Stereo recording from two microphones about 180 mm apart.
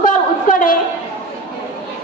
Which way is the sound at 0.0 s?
50° left (ahead or behind).